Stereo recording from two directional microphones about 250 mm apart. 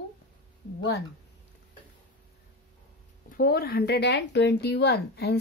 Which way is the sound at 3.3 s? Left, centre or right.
Left.